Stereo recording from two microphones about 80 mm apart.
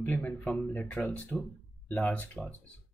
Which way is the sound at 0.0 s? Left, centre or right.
Left.